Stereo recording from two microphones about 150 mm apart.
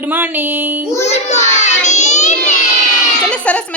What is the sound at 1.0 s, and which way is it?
Child singing, 45° left (ahead or behind).